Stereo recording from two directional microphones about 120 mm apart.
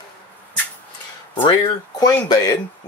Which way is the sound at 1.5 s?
30° left (ahead or behind).